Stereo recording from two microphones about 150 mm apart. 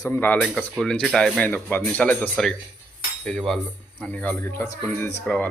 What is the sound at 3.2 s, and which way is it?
Cutlery, 5° left (ahead or behind).